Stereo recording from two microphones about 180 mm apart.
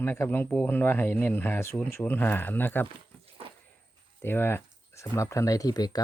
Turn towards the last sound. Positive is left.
turn(degrees=20)  # may be behind; listen again after turning